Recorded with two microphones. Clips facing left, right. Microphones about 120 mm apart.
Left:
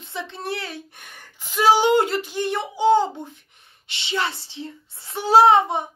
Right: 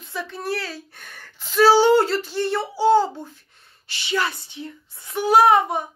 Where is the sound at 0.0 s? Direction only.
25° left (ahead or behind).